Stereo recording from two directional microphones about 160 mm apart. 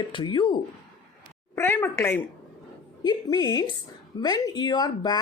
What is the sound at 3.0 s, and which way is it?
Speech, 25° left (ahead or behind).